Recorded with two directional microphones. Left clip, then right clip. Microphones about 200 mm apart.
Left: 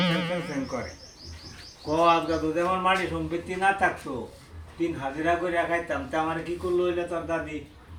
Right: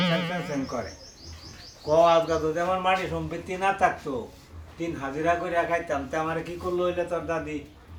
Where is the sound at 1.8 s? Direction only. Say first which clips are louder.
Right 2 dB; 10° right (ahead or behind).